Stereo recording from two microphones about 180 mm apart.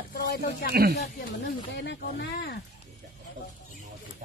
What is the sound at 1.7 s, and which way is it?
Speech, 70° left (ahead or behind).